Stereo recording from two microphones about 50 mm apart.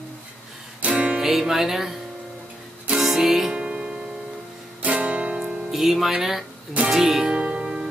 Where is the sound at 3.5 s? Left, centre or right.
Centre.